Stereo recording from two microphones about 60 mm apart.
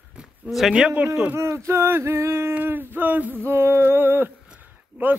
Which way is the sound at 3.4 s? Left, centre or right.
Right.